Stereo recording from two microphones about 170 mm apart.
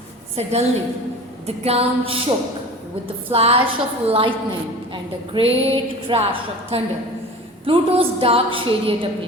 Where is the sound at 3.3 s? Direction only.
35° right (ahead or behind).